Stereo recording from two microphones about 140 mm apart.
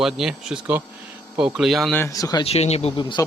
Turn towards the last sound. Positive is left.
turn(degrees=35)  # may be behind; listen again after turning